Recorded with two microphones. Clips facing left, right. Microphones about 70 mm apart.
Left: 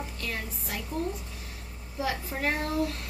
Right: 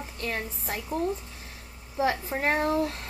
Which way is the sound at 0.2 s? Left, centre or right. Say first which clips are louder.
Right 6 dB; right.